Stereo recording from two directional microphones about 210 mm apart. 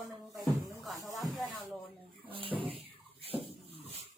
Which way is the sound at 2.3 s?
25° right (ahead or behind).